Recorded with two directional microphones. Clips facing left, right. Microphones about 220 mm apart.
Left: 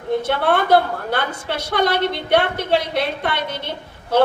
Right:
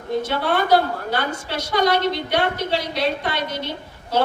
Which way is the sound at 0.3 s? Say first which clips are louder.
Left 2 dB; 55° left (ahead or behind).